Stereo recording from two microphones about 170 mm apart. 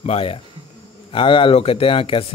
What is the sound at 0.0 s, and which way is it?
Speech, 35° left (ahead or behind).